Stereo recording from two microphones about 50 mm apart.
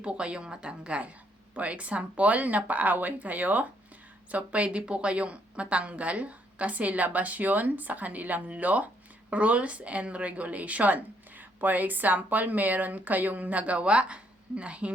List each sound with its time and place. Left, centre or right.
0.0 s a woman's voice: right